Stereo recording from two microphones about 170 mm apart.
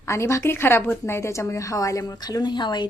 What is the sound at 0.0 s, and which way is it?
A woman's voice, 15° left (ahead or behind).